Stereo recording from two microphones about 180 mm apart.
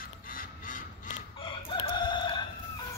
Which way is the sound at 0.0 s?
50° left (ahead or behind).